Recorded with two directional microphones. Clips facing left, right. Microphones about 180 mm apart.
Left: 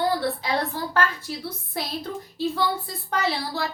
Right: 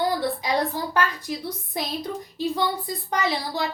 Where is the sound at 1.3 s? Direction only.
15° right (ahead or behind).